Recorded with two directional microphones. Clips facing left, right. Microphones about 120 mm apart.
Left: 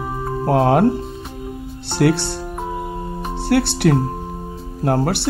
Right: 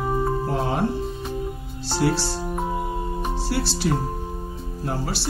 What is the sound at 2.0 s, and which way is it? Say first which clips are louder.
Speech: left 6 dB; 60° left (ahead or behind).